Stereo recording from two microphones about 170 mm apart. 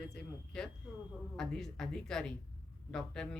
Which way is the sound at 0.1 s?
5° left (ahead or behind).